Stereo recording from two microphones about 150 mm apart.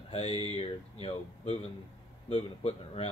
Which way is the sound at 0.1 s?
40° left (ahead or behind).